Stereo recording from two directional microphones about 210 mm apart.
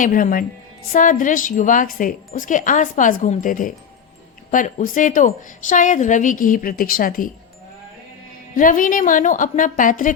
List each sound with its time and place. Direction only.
0.0 s speech: 40° left (ahead or behind)
8.5 s speech: 40° left (ahead or behind)